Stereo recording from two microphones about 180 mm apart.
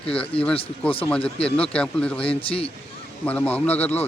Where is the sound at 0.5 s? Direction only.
30° left (ahead or behind).